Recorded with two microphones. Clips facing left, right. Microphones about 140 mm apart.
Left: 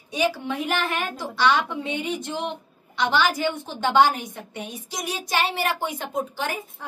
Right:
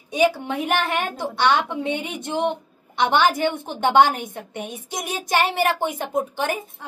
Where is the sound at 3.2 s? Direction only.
20° right (ahead or behind).